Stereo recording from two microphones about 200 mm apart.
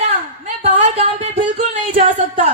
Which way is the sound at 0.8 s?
30° right (ahead or behind).